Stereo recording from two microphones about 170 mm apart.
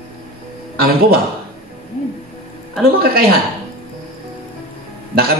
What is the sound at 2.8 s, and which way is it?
Speech, 65° right (ahead or behind).